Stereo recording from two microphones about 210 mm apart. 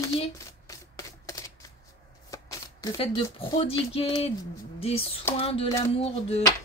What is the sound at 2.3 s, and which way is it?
Speech, 15° left (ahead or behind).